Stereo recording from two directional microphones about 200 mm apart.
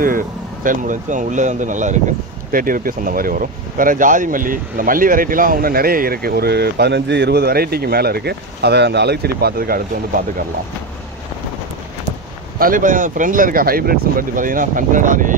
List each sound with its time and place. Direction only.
0.7 s speech: 40° right (ahead or behind)
12.5 s speech: 45° right (ahead or behind)